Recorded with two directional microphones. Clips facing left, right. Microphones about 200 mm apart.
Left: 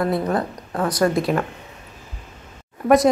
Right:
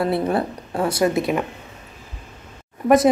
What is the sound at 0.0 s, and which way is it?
Speech, 30° right (ahead or behind).